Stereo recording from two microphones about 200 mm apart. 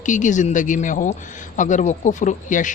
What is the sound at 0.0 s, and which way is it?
A man's voice, 40° left (ahead or behind).